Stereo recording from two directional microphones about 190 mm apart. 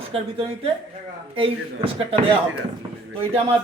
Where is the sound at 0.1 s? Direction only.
30° right (ahead or behind).